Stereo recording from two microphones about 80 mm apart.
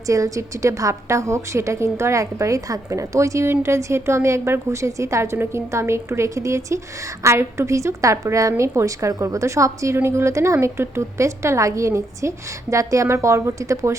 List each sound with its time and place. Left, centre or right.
0.1 s a woman's voice: right